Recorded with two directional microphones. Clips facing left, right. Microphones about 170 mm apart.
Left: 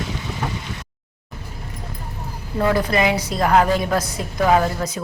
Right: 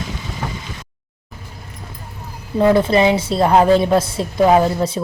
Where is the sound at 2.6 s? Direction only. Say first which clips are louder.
Right 6 dB; 25° right (ahead or behind).